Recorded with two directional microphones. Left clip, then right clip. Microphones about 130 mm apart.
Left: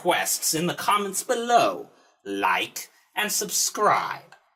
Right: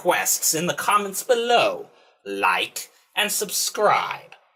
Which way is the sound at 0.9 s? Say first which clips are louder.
Right 5 dB; 30° left (ahead or behind).